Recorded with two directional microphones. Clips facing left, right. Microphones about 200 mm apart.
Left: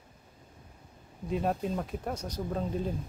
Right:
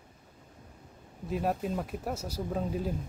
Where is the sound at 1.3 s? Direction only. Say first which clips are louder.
Left 1 dB; 5° right (ahead or behind).